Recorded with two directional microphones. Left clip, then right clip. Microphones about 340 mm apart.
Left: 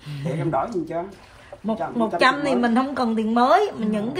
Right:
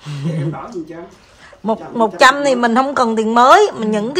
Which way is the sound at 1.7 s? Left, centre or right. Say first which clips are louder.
Right 7 dB; centre.